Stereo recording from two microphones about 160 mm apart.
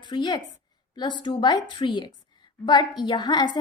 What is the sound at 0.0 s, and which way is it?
A woman's voice, 30° left (ahead or behind).